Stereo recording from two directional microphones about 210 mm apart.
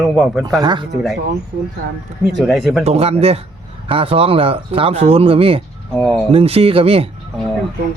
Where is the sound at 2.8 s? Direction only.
30° right (ahead or behind).